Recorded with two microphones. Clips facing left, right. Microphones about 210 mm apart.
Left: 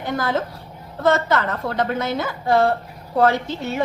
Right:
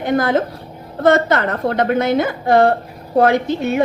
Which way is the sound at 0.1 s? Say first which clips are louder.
Right 7 dB; 60° right (ahead or behind).